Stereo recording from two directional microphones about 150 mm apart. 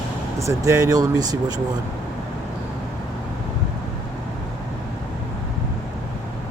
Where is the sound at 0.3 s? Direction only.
20° right (ahead or behind).